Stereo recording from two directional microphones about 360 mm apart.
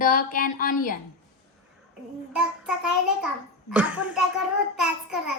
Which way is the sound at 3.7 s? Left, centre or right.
Centre.